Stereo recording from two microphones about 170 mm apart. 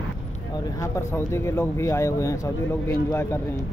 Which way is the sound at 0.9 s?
15° left (ahead or behind).